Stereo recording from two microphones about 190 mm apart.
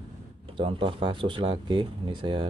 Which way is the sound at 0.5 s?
25° right (ahead or behind).